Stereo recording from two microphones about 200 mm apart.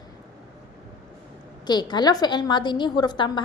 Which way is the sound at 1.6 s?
20° left (ahead or behind).